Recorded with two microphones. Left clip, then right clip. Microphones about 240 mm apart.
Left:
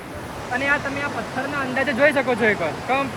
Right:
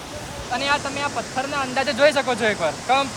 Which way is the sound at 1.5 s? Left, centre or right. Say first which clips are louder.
Even; centre.